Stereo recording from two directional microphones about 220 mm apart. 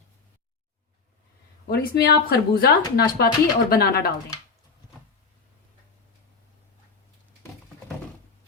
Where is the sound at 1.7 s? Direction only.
45° left (ahead or behind).